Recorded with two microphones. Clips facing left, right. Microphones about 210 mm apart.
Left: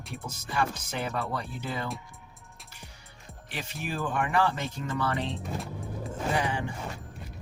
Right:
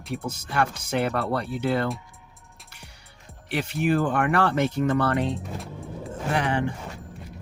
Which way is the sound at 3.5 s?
65° right (ahead or behind).